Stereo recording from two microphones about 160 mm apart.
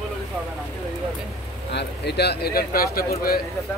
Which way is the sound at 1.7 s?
90° left.